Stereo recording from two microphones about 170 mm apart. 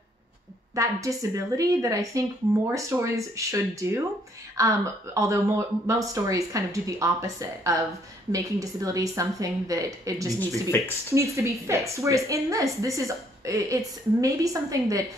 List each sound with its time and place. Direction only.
0.7 s a woman's voice: 20° right (ahead or behind)
10.7 s speech: 15° left (ahead or behind)
11.3 s a woman's voice: 15° right (ahead or behind)